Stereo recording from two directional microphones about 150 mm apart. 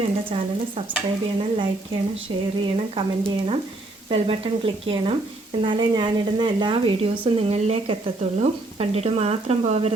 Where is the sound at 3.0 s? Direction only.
30° right (ahead or behind).